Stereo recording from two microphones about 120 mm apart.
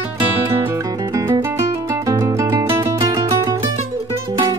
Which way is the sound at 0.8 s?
35° right (ahead or behind).